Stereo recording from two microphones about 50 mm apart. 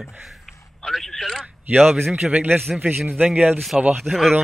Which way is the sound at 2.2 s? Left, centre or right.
Right.